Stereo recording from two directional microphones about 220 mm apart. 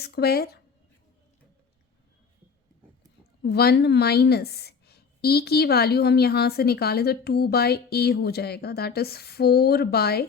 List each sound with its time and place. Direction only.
0.0 s a woman's voice: 45° left (ahead or behind)
3.4 s a woman's voice: 45° left (ahead or behind)